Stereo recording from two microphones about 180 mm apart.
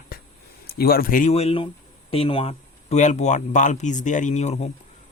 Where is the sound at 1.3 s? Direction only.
35° left (ahead or behind).